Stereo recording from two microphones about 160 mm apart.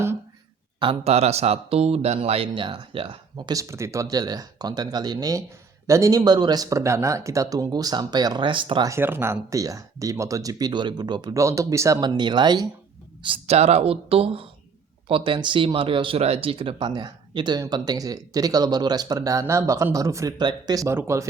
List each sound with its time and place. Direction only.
0.8 s speech: 35° right (ahead or behind)
8.9 s speech: 15° right (ahead or behind)